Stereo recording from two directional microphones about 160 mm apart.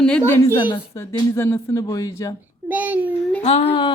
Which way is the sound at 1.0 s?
20° left (ahead or behind).